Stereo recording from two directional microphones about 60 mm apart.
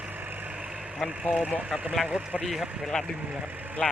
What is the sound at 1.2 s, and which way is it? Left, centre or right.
Speech, right.